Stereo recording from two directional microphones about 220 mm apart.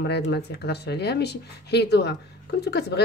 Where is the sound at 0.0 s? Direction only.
50° left (ahead or behind).